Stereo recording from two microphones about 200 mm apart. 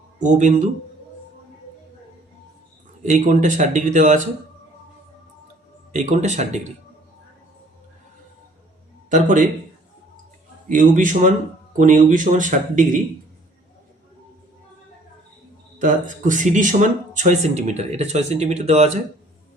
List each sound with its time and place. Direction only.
0.2 s speech: 35° right (ahead or behind)
3.0 s speech: 40° right (ahead or behind)
5.9 s speech: 35° right (ahead or behind)
9.0 s speech: 40° right (ahead or behind)
10.7 s speech: 40° right (ahead or behind)
15.8 s speech: 40° right (ahead or behind)